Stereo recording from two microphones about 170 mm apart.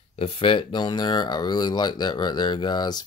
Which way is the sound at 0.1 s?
35° left (ahead or behind).